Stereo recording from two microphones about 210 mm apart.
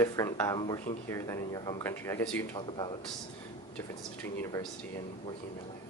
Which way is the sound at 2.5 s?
20° left (ahead or behind).